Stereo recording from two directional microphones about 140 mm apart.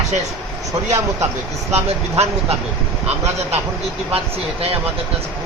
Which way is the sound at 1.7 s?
45° right (ahead or behind).